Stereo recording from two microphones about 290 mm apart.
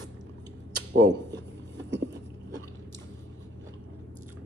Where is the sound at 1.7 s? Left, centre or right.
Right.